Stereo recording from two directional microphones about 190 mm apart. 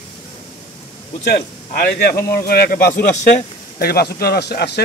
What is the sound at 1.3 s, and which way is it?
A man's voice, 50° left (ahead or behind).